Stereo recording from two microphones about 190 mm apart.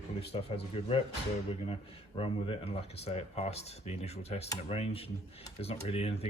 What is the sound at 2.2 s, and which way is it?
Speech, 30° left (ahead or behind).